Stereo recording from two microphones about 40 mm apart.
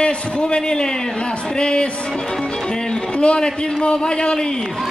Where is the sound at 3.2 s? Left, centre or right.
Left.